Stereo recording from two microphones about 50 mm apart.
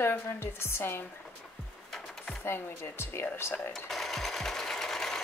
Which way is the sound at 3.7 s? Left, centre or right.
Centre.